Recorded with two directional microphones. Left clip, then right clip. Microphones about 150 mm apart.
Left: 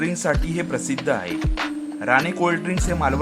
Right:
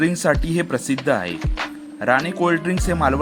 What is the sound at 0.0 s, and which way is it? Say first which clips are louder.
Speech: right 4 dB; 25° right (ahead or behind).